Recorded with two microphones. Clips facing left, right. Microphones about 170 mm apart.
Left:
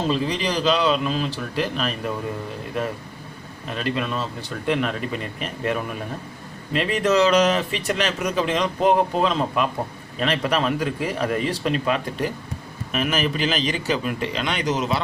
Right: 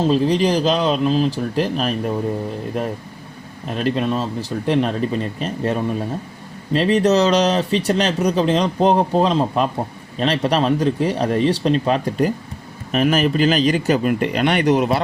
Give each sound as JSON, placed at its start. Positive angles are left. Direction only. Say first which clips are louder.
{"t": 0.1, "sound": "speech", "louder": "right 7 dB", "side_deg": -40}
{"t": 3.8, "sound": "speech", "louder": "right 6 dB", "side_deg": -40}